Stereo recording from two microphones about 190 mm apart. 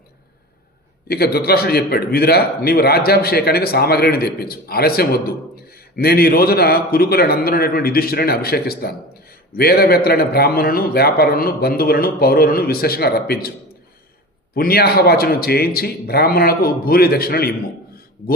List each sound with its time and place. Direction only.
1.0 s a man's voice: 55° left (ahead or behind)
14.5 s a man's voice: 55° left (ahead or behind)